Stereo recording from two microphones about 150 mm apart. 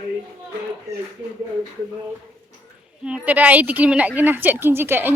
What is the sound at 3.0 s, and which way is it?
A woman's voice, 10° right (ahead or behind).